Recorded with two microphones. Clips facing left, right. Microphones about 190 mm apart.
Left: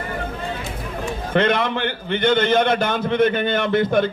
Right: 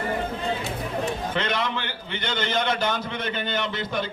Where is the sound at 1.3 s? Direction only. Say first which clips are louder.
Left 8 dB; 55° left (ahead or behind).